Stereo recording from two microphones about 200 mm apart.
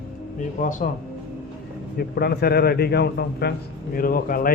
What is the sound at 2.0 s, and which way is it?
A man's voice, 50° left (ahead or behind).